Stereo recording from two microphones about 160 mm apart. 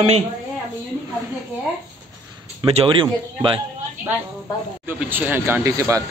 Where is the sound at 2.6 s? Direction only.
35° right (ahead or behind).